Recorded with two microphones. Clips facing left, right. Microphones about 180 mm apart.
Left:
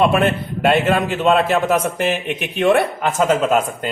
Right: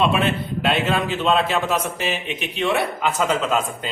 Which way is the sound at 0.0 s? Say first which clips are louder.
Left 4 dB; 50° left (ahead or behind).